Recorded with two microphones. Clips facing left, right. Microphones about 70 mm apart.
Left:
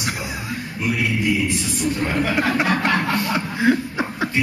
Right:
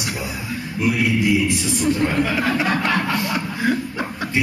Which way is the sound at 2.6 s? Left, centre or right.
Centre.